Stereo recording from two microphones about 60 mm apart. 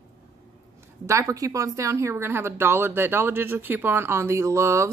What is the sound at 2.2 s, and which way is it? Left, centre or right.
Speech, right.